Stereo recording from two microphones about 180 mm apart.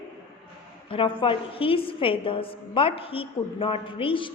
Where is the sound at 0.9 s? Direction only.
30° left (ahead or behind).